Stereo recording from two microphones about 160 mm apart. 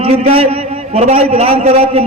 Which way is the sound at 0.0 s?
40° right (ahead or behind).